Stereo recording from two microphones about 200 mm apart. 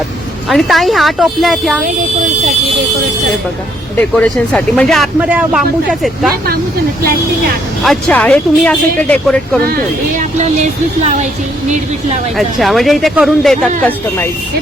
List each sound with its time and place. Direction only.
0.4 s speech: centre (ahead or behind)
3.9 s speech: 5° left (ahead or behind)
7.9 s speech: 5° left (ahead or behind)
10.2 s music: 35° right (ahead or behind)
12.4 s speech: centre (ahead or behind)